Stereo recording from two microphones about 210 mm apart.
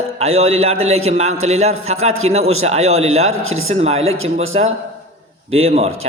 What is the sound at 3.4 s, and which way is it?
Speech, 80° right.